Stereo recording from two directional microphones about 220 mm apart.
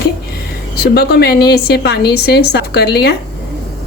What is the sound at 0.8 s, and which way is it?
A woman's voice, 45° left (ahead or behind).